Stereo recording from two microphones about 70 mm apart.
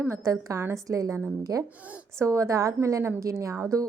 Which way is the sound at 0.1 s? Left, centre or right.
Right.